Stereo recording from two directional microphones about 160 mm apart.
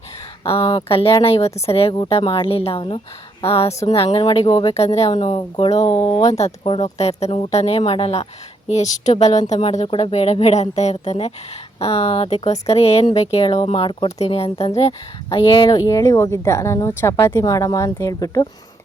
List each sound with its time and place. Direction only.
0.6 s speech: 25° left (ahead or behind)
0.9 s speech: 35° left (ahead or behind)
6.3 s speech: 40° left (ahead or behind); by 18.4 s 20° left (ahead or behind)